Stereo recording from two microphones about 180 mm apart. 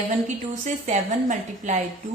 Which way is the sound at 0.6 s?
40° right (ahead or behind).